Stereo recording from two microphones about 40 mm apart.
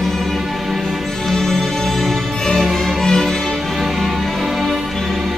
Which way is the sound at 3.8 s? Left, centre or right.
Centre.